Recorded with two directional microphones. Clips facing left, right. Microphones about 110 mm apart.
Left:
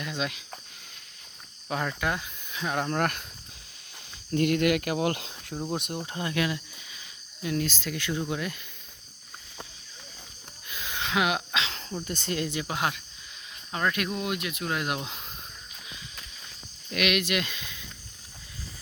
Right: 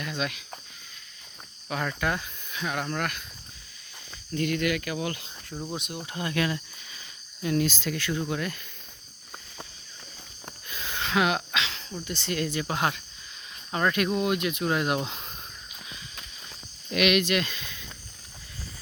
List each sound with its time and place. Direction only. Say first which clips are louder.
0.0 s speech: even; 20° left (ahead or behind)
1.6 s speech: even; 15° left (ahead or behind)
4.3 s speech: left 3 dB; 55° left (ahead or behind); by 5.5 s 75° left (ahead or behind)
5.7 s speech: left 5 dB; 50° left (ahead or behind)
6.1 s speech: right 2 dB; 20° left (ahead or behind)
7.4 s speech: right 3 dB; centre (ahead or behind)
7.9 s speech: right 1 dB; 20° left (ahead or behind)
10.7 s a sound: right 1 dB; 10° left (ahead or behind)
11.5 s a sound: even; 35° left (ahead or behind)
12.0 s speech: even; 45° left (ahead or behind)
12.3 s speech: right 1 dB; 20° left (ahead or behind)
12.6 s speech: right 2 dB; 5° left (ahead or behind)
15.9 s walk: even; 5° left (ahead or behind)
16.9 s speech: right 3 dB; centre (ahead or behind)